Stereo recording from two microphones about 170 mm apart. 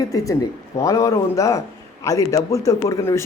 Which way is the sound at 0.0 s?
20° left (ahead or behind).